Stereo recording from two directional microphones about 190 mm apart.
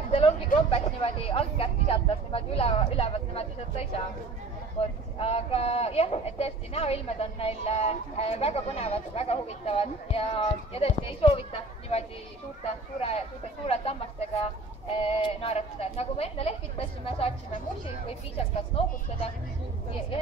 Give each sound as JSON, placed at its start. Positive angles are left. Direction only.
{"t": 0.1, "sound": "speech", "side_deg": 30}
{"t": 13.0, "sound": "speech", "side_deg": 30}